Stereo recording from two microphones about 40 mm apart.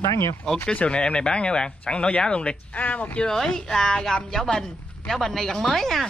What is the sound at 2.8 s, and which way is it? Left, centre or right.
Speech, left.